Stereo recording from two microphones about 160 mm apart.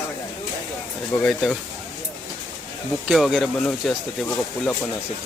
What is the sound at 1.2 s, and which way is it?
Speech, 5° left (ahead or behind).